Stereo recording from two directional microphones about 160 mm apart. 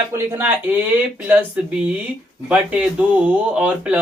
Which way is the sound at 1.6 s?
5° right (ahead or behind).